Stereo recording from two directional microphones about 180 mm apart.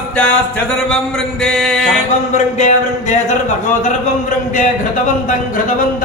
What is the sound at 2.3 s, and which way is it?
Speech, 40° left (ahead or behind).